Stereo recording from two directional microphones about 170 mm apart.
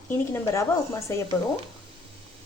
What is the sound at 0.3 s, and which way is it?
Speech, 15° left (ahead or behind).